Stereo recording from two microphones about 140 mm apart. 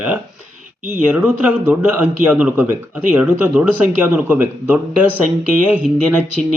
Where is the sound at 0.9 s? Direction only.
10° right (ahead or behind).